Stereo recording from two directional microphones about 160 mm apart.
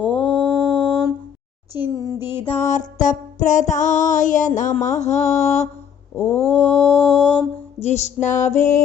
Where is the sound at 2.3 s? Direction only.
35° left (ahead or behind).